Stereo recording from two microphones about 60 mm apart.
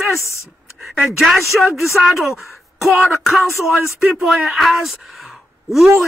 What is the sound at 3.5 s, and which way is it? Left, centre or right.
Speech, left.